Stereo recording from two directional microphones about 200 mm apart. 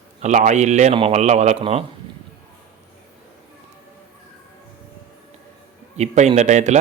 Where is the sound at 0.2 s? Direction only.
35° right (ahead or behind).